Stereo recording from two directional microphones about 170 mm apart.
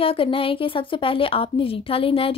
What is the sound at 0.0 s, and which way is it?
A woman's voice, 30° left (ahead or behind).